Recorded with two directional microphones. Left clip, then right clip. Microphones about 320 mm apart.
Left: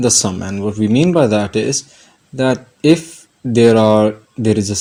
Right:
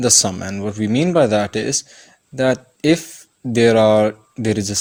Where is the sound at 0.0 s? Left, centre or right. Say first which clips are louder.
Left 1 dB; right.